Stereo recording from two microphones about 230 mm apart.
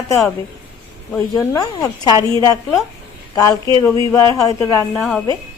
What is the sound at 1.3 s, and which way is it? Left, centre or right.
Speech, centre.